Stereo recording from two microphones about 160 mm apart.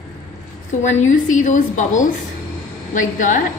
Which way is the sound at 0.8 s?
50° left (ahead or behind).